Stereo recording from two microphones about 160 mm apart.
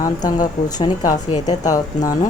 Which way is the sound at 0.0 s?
25° left (ahead or behind).